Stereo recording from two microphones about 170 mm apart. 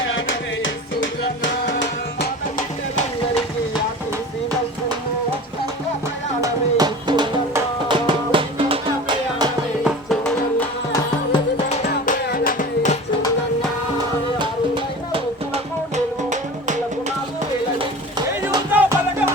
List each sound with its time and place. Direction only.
0.3 s music: 90° left
6.4 s music: 25° right (ahead or behind)
9.8 s music: centre (ahead or behind)
12.0 s music: 55° left (ahead or behind)
18.4 s music: 10° right (ahead or behind)